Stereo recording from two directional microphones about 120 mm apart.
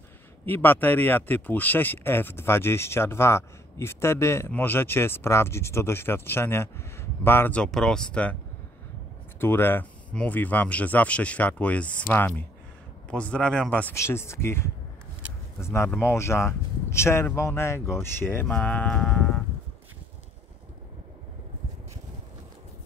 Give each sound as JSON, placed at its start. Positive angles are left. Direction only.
{"t": 0.5, "sound": "speech", "side_deg": 15}
{"t": 9.4, "sound": "speech", "side_deg": 20}
{"t": 13.9, "sound": "speech", "side_deg": 25}